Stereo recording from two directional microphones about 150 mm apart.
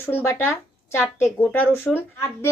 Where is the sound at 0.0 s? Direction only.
15° left (ahead or behind).